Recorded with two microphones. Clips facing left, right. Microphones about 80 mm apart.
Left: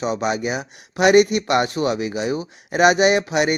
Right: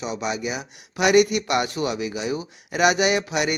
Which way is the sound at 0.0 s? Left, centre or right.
Left.